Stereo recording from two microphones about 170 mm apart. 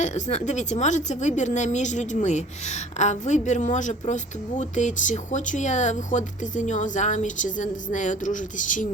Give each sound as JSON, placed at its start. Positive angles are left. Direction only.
{"t": 0.0, "sound": "a woman's voice", "side_deg": 40}